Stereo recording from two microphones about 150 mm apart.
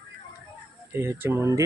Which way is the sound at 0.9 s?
15° right (ahead or behind).